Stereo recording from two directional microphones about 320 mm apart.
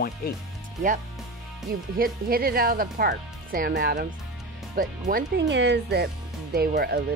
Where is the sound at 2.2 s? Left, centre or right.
Right.